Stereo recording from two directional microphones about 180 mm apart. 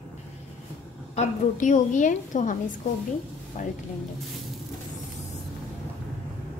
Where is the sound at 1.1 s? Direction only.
45° left (ahead or behind).